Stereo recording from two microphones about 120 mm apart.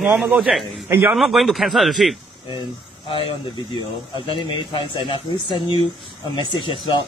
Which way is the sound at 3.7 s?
40° left (ahead or behind).